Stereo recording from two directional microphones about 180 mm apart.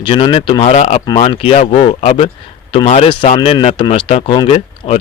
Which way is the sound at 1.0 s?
25° left (ahead or behind).